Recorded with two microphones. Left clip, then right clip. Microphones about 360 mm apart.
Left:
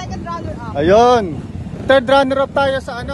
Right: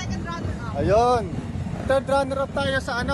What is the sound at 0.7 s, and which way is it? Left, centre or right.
Speech, left.